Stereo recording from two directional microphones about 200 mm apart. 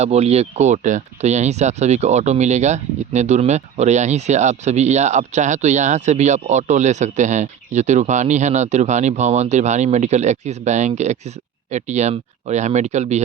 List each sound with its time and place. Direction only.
0.0 s speech: 30° right (ahead or behind)